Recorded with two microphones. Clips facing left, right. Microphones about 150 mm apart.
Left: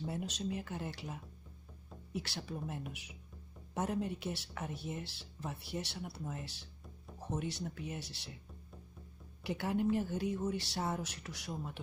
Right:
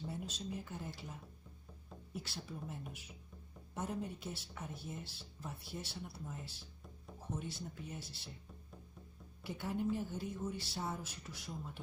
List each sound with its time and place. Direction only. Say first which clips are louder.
0.0 s speech: left 5 dB; 75° left (ahead or behind)
3.7 s speech: left 5 dB; 90° left
9.4 s speech: left 5 dB; 75° left (ahead or behind)